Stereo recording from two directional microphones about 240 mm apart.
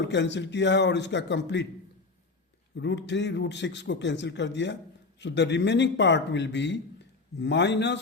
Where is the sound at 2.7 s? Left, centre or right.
Left.